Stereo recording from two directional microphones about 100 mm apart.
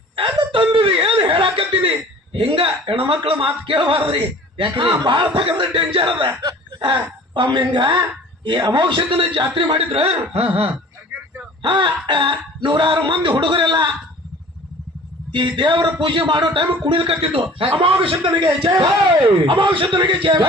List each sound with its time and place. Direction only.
0.2 s chuckle: 60° right (ahead or behind)
2.3 s a man's voice: 65° right (ahead or behind)
11.6 s speech: 55° right (ahead or behind)
15.3 s a man's voice: 55° right (ahead or behind)